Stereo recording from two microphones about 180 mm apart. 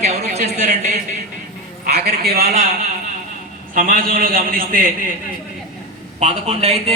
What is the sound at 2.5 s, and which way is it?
A man's voice, 40° right (ahead or behind).